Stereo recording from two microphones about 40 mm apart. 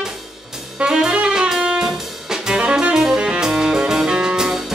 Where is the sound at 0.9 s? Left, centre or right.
Centre.